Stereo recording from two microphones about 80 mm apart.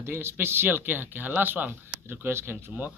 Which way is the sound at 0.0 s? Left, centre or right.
Right.